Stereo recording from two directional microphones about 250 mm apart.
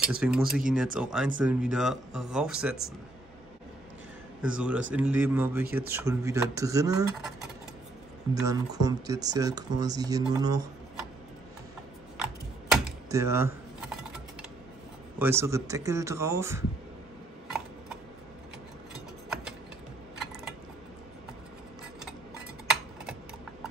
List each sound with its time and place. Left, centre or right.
0.0 s speech: centre
4.4 s speech: centre
7.2 s speech: centre
8.5 s speech: centre
12.2 s typing: centre
15.1 s speech: centre
18.9 s mechanisms: centre